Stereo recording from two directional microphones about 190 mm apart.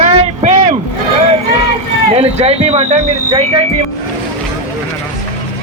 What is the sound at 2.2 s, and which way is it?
Speech, 35° right (ahead or behind).